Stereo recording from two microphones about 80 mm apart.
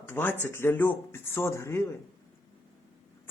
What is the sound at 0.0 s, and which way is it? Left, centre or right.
Speech, left.